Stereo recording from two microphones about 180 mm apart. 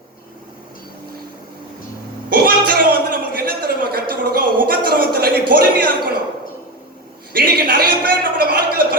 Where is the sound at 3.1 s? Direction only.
55° right (ahead or behind).